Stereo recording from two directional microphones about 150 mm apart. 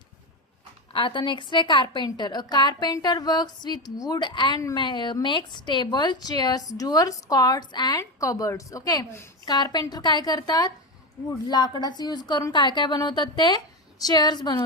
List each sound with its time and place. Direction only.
0.9 s a woman's voice: 35° left (ahead or behind)